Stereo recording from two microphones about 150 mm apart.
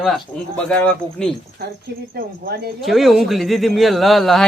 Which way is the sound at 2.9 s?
Centre (ahead or behind).